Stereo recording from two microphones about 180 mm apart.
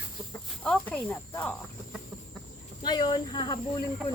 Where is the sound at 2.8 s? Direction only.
25° left (ahead or behind).